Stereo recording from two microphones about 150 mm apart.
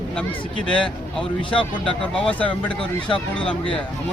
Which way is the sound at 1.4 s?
35° left (ahead or behind).